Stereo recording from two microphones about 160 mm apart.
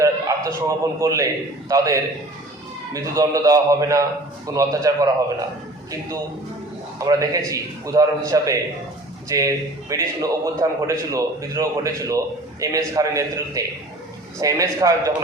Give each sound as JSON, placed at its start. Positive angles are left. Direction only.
{"t": 0.0, "sound": "a man's voice", "side_deg": -20}
{"t": 7.0, "sound": "a man's voice", "side_deg": -20}